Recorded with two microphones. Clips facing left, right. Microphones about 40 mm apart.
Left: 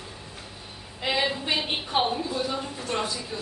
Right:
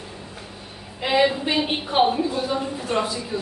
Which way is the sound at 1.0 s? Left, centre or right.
Centre.